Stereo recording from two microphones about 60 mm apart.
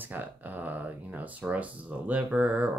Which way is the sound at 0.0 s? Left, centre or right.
Right.